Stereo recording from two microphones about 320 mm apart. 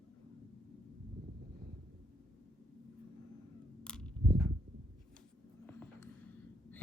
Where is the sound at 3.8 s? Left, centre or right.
Centre.